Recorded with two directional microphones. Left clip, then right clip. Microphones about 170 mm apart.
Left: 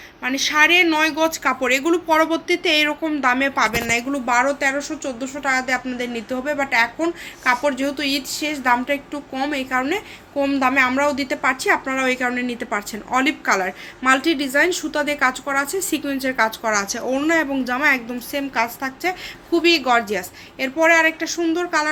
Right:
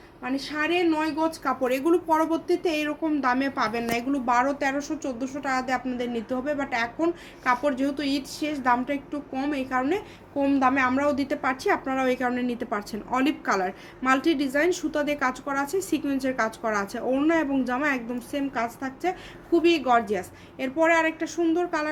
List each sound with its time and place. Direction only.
0.5 s speech: 25° left (ahead or behind)
1.6 s speech: 10° left (ahead or behind)